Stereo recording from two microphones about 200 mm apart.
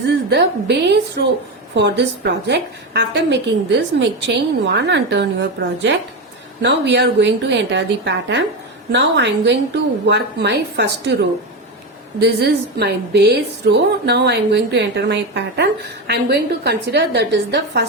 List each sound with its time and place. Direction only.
0.1 s a woman's voice: 60° right (ahead or behind)